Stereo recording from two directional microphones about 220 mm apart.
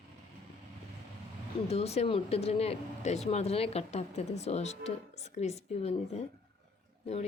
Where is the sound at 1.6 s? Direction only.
30° left (ahead or behind).